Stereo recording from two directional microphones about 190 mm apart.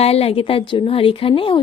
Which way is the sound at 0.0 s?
30° left (ahead or behind).